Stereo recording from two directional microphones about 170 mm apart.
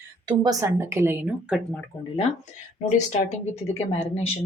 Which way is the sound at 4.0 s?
35° left (ahead or behind).